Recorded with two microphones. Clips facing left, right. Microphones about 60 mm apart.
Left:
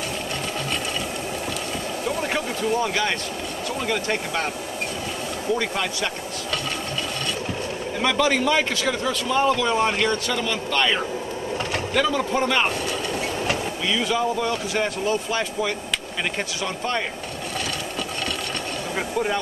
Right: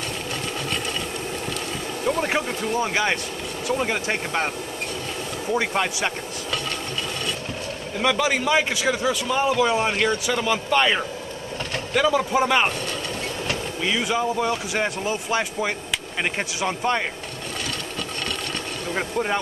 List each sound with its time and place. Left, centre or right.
2.8 s speech: right
5.5 s speech: right
8.0 s a man's voice: centre
13.9 s a man's voice: centre